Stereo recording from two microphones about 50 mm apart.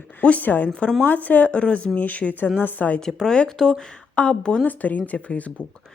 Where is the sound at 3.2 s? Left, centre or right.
Centre.